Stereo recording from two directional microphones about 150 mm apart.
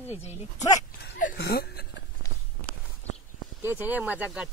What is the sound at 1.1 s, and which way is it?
Speech, 75° left (ahead or behind).